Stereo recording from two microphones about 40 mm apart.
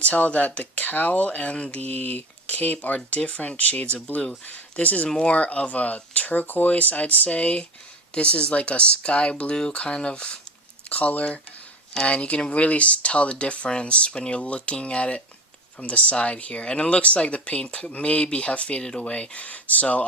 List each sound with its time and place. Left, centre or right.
0.0 s speech: left
1.9 s speech: left
3.2 s speech: left
10.8 s speech: left